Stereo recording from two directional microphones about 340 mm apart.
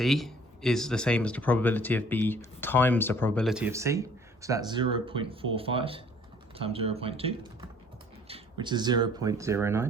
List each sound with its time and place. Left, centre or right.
0.0 s speech: centre